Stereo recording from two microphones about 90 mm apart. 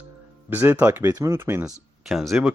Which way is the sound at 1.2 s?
30° right (ahead or behind).